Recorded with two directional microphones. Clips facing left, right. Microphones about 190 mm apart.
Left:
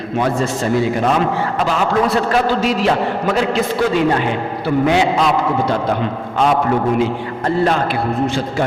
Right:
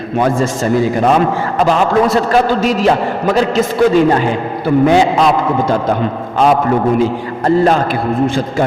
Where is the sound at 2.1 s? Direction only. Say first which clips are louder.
Right 4 dB; 40° right (ahead or behind).